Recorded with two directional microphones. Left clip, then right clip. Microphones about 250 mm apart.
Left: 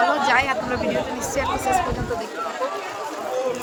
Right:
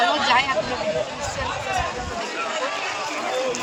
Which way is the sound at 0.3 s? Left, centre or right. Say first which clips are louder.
Even; centre.